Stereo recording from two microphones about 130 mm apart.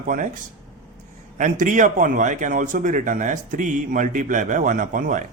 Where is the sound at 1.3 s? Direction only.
80° right.